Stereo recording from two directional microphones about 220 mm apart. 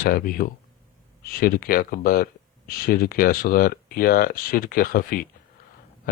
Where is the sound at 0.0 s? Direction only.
40° left (ahead or behind).